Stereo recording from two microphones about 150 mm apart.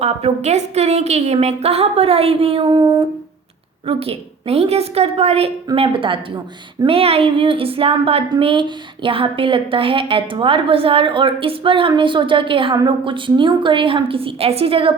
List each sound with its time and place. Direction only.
0.0 s a woman's voice: 45° right (ahead or behind)